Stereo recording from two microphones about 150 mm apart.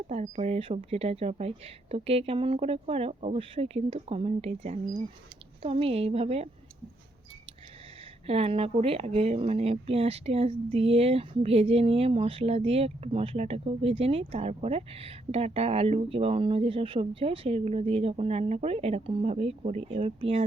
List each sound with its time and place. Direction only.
0.1 s speech: 45° right (ahead or behind)
8.3 s speech: 40° right (ahead or behind)